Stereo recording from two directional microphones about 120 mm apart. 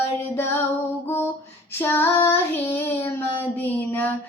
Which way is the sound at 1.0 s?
20° left (ahead or behind).